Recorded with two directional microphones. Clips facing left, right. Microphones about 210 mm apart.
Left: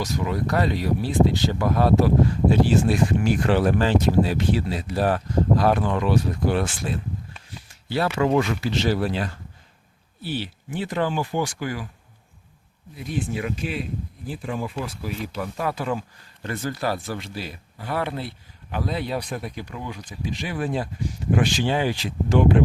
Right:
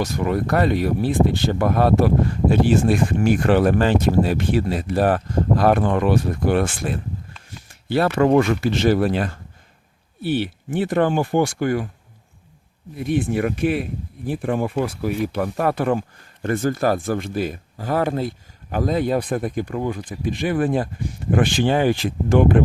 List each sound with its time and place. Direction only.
0.0 s speech: 55° right (ahead or behind)
7.7 s a sound: 55° right (ahead or behind)
8.0 s speech: 50° right (ahead or behind)
13.0 s speech: 55° right (ahead or behind)